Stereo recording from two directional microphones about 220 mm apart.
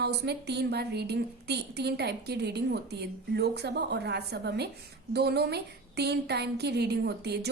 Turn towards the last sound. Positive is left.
turn(degrees=-50)  # may be behind; listen again after turning